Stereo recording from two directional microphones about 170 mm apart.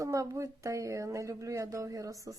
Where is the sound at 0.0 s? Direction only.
20° right (ahead or behind).